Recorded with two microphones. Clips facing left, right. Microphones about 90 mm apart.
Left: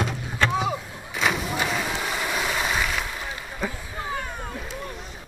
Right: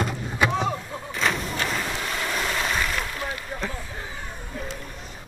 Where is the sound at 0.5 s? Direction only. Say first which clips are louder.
Even; 5° left (ahead or behind).